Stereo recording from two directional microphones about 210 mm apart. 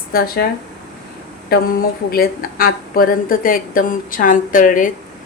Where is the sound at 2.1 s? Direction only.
45° left (ahead or behind).